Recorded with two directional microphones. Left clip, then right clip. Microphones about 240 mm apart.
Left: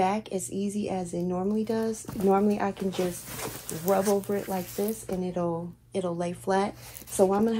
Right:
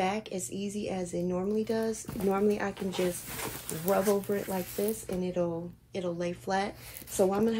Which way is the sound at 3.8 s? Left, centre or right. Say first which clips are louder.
Left 2 dB; centre.